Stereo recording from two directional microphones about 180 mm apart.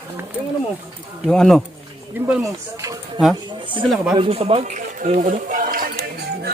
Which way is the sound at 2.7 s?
20° right (ahead or behind).